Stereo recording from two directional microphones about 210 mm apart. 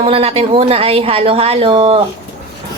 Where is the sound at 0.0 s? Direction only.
25° right (ahead or behind).